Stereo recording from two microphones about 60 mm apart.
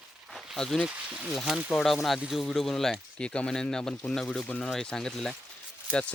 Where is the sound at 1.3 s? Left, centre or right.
Centre.